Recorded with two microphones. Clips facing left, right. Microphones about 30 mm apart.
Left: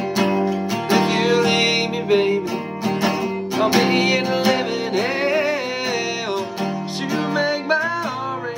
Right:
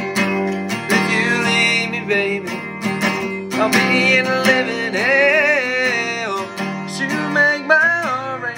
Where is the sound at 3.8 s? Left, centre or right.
Right.